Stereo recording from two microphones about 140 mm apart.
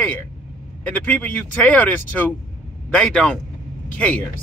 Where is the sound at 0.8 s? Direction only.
10° left (ahead or behind).